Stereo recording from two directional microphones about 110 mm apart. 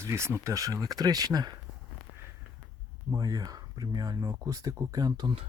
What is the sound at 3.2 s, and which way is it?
Speech, 35° right (ahead or behind).